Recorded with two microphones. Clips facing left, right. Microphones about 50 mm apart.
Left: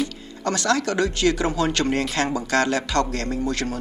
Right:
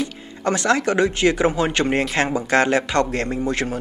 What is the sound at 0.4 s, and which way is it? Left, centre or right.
Speech, right.